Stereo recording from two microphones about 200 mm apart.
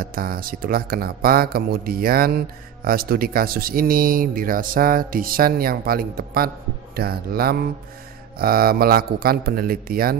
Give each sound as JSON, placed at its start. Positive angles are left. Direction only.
{"t": 0.0, "sound": "speech", "side_deg": -45}